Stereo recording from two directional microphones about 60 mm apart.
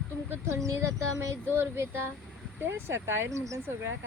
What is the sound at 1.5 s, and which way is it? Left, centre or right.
Speech, right.